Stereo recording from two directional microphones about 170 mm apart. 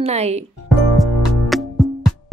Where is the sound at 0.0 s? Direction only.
40° right (ahead or behind).